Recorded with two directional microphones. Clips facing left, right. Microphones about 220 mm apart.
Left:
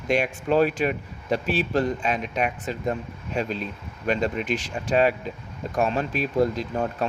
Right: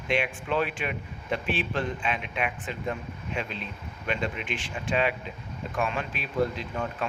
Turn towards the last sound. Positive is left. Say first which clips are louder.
# left 5 dB
turn(degrees=40)  # may be behind; listen again after turning